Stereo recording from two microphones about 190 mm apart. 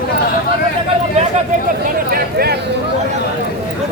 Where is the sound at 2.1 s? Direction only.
55° right (ahead or behind).